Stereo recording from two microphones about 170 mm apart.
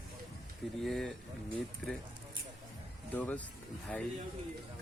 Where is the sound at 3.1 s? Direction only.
10° left (ahead or behind).